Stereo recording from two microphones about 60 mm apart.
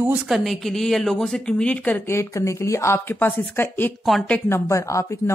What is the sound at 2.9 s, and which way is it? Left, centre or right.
Speech, left.